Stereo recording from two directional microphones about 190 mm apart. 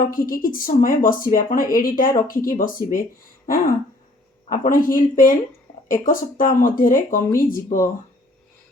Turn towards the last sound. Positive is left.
turn(degrees=45)  # may be behind; listen again after turning